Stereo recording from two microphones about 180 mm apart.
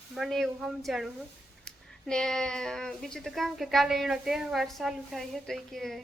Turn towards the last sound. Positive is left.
turn(degrees=0)  # may be behind; listen again after turning